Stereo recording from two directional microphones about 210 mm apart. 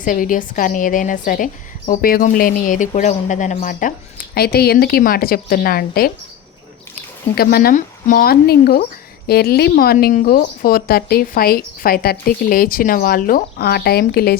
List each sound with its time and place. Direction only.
0.0 s speech: 40° left (ahead or behind)
7.3 s speech: 45° left (ahead or behind)